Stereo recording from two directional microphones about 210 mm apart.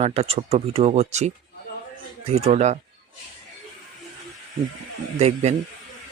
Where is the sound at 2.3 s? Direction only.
30° right (ahead or behind).